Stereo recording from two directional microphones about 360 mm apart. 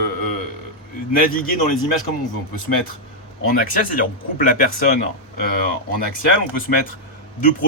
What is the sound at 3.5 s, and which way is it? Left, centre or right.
Speech, left.